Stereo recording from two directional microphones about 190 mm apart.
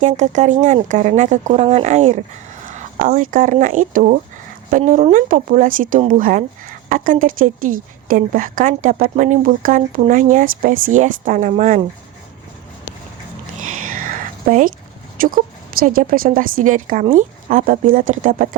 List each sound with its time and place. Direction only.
0.0 s speech: 40° right (ahead or behind)
13.8 s a sound: 45° right (ahead or behind)
15.2 s speech: 45° right (ahead or behind)